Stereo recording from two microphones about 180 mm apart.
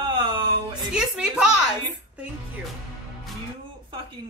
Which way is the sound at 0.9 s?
5° right (ahead or behind).